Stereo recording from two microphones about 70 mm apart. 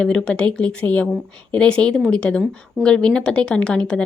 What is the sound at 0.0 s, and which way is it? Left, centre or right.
A woman's voice, centre.